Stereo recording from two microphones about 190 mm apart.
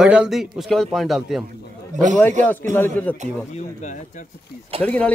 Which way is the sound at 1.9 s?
40° right (ahead or behind).